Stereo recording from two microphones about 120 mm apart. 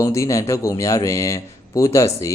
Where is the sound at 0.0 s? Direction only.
25° left (ahead or behind).